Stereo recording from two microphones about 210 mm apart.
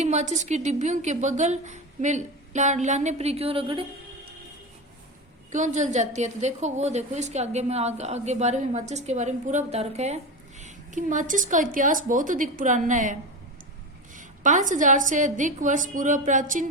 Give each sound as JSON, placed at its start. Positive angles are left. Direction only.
{"t": 0.0, "sound": "a woman's voice", "side_deg": -30}
{"t": 5.5, "sound": "a woman's voice", "side_deg": -35}
{"t": 14.2, "sound": "a woman's voice", "side_deg": -35}